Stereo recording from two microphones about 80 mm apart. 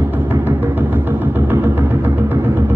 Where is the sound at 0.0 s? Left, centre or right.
Right.